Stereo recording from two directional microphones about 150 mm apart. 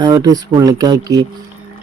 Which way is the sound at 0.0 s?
25° right (ahead or behind).